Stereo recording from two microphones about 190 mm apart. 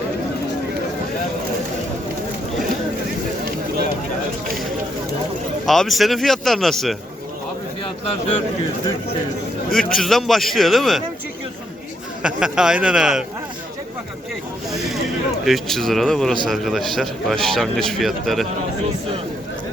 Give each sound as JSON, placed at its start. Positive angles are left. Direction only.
{"t": 5.6, "sound": "speech", "side_deg": 0}
{"t": 9.7, "sound": "speech", "side_deg": 0}
{"t": 12.2, "sound": "speech", "side_deg": -5}
{"t": 15.4, "sound": "speech", "side_deg": 0}